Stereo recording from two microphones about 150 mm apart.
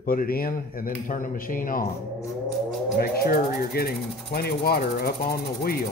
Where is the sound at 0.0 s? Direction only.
70° left (ahead or behind).